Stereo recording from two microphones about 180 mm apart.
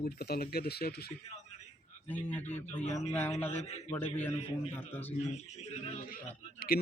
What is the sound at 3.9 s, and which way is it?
Speech, 10° left (ahead or behind).